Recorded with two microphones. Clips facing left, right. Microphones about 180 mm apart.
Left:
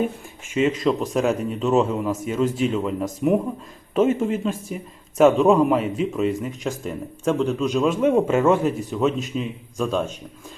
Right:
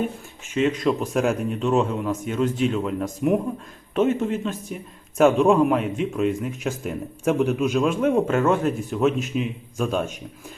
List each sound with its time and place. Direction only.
0.8 s speech: centre (ahead or behind)